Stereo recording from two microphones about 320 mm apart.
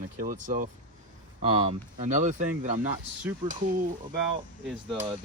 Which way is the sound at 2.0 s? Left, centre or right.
Right.